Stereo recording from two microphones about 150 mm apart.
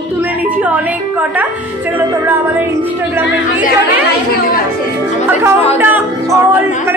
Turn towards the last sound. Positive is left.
turn(degrees=-15)  # may be behind; listen again after turning